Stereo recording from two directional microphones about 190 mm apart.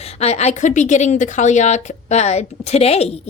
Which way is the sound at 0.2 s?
35° left (ahead or behind).